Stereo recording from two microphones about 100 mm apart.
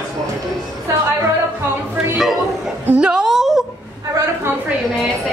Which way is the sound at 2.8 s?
10° right (ahead or behind).